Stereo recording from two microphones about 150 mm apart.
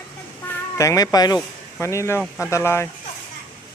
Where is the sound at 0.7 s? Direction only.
20° left (ahead or behind).